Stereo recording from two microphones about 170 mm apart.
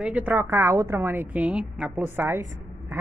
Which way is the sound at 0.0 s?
10° right (ahead or behind).